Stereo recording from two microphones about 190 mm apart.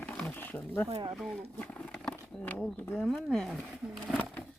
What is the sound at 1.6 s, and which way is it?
Speech, 5° left (ahead or behind).